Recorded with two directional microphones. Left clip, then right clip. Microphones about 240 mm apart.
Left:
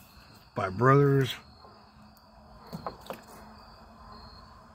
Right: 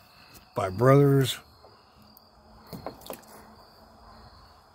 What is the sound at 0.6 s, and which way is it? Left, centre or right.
Speech, centre.